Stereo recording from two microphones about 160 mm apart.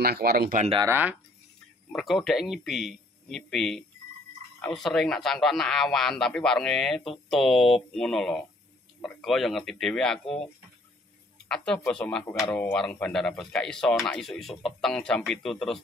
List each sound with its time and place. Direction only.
0.0 s speech: 75° right (ahead or behind)
0.8 s speech: 15° right (ahead or behind)
1.9 s speech: centre (ahead or behind)
11.4 s speech: 5° left (ahead or behind)